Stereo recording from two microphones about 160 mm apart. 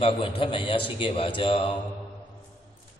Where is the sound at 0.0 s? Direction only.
35° left (ahead or behind).